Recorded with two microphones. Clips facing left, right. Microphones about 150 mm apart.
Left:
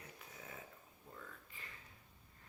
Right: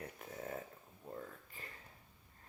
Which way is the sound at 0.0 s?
50° right (ahead or behind).